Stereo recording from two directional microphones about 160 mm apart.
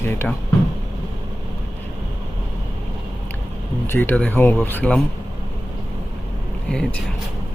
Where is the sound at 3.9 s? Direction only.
15° left (ahead or behind).